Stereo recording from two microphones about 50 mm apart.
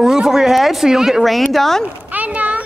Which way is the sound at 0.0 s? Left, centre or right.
Centre.